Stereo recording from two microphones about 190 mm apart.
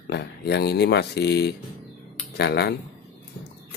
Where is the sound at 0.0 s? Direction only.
60° left (ahead or behind).